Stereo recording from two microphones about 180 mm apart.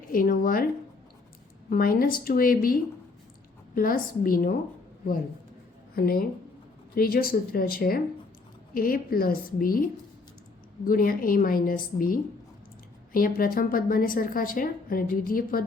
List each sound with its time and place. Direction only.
0.1 s a woman's voice: 50° left (ahead or behind)
1.7 s a woman's voice: 50° left (ahead or behind)
3.8 s a woman's voice: 50° left (ahead or behind)
5.9 s a woman's voice: 55° left (ahead or behind)
10.8 s a woman's voice: 55° left (ahead or behind)